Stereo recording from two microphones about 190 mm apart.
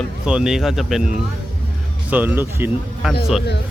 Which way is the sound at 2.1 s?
10° right (ahead or behind).